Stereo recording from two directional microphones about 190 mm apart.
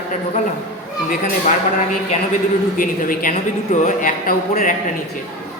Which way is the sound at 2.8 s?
45° left (ahead or behind).